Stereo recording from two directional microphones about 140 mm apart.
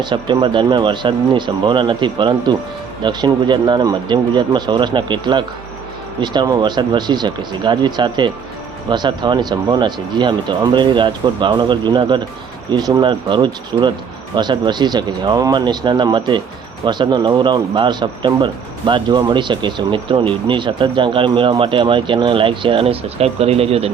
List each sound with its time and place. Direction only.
0.0 s speech: 35° right (ahead or behind)